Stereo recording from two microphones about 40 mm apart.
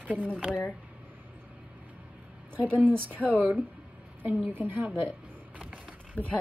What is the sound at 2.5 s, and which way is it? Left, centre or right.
Speech, right.